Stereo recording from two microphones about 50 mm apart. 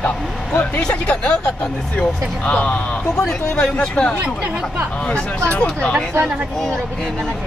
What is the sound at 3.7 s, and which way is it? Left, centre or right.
Speech, left.